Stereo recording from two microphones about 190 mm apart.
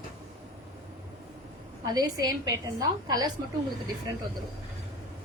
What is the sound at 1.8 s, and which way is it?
A woman's voice, 20° right (ahead or behind).